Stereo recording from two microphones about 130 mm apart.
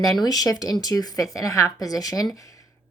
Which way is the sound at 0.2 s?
30° left (ahead or behind).